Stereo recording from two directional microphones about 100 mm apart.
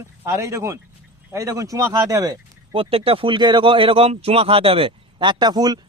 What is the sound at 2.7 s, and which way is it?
Speech, 65° right (ahead or behind).